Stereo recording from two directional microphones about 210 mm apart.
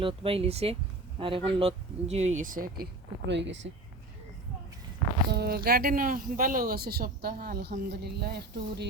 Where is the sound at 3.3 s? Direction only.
60° right (ahead or behind).